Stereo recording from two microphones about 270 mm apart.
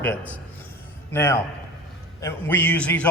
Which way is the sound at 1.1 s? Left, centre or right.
Centre.